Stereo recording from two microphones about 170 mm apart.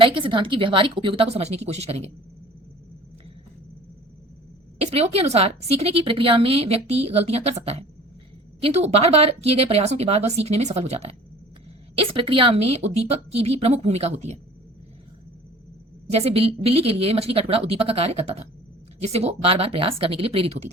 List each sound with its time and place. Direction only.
0.0 s a woman's voice: 30° right (ahead or behind)
4.8 s a woman's voice: 40° right (ahead or behind)
16.0 s a woman's voice: 35° right (ahead or behind)